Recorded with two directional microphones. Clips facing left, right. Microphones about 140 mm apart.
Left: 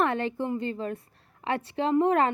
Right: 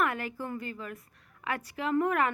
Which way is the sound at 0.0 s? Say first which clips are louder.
Left 5 dB; 25° left (ahead or behind).